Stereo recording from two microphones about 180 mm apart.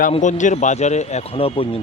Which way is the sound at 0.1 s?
40° left (ahead or behind).